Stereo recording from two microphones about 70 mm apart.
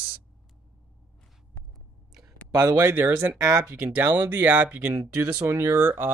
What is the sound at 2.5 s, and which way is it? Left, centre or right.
Speech, right.